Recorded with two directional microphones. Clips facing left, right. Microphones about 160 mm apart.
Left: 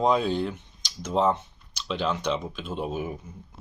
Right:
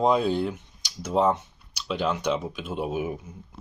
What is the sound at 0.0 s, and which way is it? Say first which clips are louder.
Speech: right 1 dB; 5° right (ahead or behind).